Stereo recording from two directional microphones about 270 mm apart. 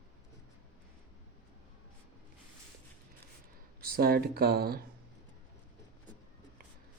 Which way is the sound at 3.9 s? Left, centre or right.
Right.